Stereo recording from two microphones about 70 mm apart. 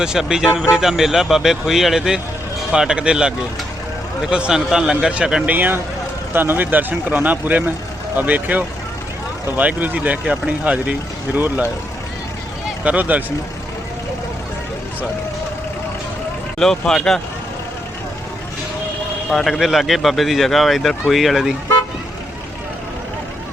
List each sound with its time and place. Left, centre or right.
0.0 s a man's voice: centre
5.5 s speech: right
12.8 s speech: right
16.6 s speech: centre
19.3 s speech: centre